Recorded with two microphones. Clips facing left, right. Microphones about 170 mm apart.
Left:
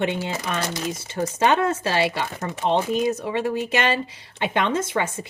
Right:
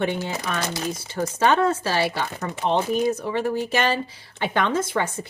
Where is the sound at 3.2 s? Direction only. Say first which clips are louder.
Even; 20° left (ahead or behind).